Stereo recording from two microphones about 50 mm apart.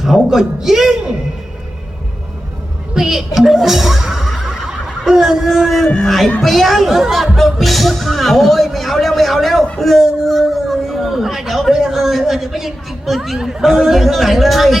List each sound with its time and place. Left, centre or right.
0.0 s a man's voice: centre
2.9 s a man's voice: centre